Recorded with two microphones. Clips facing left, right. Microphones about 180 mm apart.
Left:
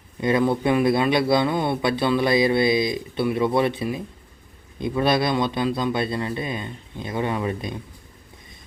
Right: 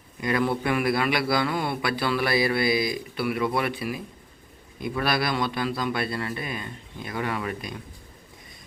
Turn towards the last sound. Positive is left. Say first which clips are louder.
# left 4 dB
turn(degrees=25)  # may be behind; listen again after turning